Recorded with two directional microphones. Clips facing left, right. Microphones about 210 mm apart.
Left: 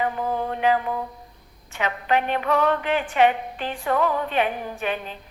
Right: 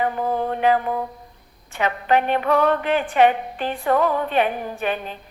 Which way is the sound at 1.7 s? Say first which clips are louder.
Right 3 dB; 35° right (ahead or behind).